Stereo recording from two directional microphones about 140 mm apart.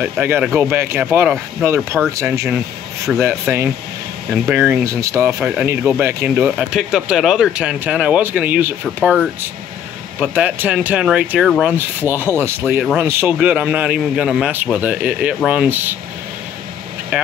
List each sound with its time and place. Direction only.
0.0 s a man's voice: 10° right (ahead or behind)
5.4 s a man's voice: 10° right (ahead or behind)
11.7 s a man's voice: 15° right (ahead or behind)
17.1 s speech: 15° right (ahead or behind)